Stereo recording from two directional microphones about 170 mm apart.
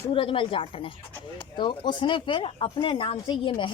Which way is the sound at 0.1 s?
30° left (ahead or behind).